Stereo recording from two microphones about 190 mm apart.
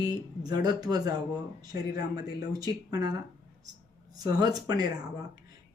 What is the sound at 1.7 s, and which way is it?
Speech, 55° left (ahead or behind).